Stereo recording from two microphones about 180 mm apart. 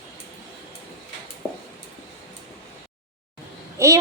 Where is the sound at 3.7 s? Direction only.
15° right (ahead or behind).